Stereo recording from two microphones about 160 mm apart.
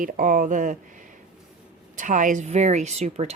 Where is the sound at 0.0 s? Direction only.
60° right (ahead or behind).